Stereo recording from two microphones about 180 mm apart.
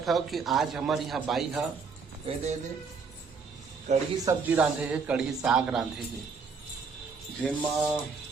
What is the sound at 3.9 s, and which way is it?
Speech, 40° right (ahead or behind).